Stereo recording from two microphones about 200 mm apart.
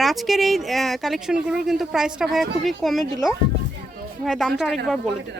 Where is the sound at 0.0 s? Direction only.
Centre (ahead or behind).